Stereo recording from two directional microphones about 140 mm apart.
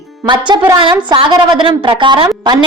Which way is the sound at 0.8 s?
35° right (ahead or behind).